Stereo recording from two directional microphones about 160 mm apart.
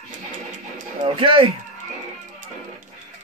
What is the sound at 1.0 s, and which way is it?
Speech, 30° right (ahead or behind).